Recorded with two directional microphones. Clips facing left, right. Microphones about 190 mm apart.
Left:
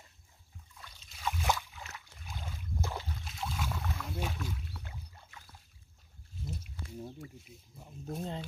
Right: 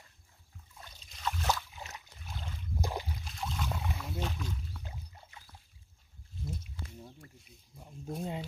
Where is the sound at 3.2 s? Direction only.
Centre (ahead or behind).